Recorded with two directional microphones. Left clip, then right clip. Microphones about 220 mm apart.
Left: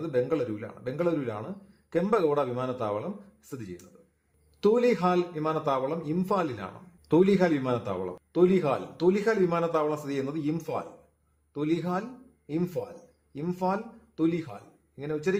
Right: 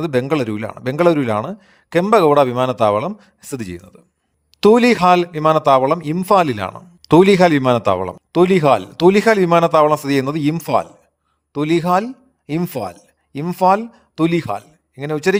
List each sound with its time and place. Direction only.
0.0 s a man's voice: 45° right (ahead or behind)